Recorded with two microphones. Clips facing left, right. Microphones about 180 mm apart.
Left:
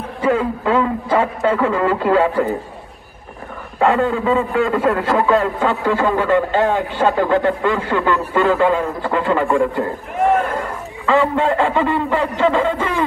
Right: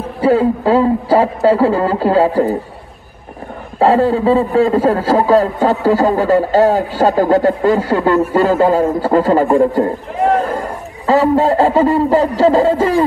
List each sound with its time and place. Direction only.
0.2 s a man's voice: 35° right (ahead or behind)
3.8 s a man's voice: 35° right (ahead or behind)